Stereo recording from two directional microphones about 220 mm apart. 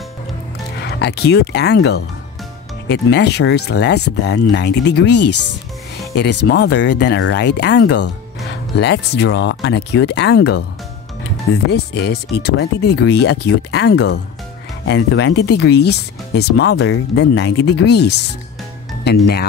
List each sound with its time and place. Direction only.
0.7 s speech: 50° left (ahead or behind)
6.5 s speech: 50° left (ahead or behind)
11.7 s speech: 50° left (ahead or behind)